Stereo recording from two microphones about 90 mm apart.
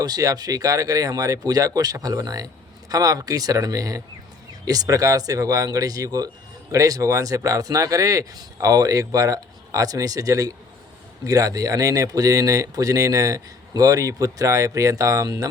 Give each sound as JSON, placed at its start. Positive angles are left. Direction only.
{"t": 0.0, "sound": "speech", "side_deg": -45}